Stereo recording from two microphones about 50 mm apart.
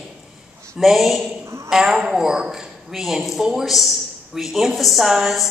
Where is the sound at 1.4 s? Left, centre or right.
Right.